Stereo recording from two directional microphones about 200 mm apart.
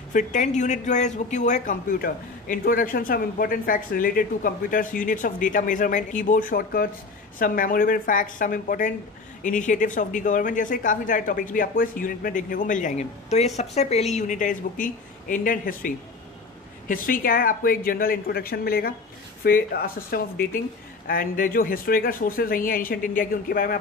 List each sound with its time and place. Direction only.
0.1 s speech: 40° left (ahead or behind)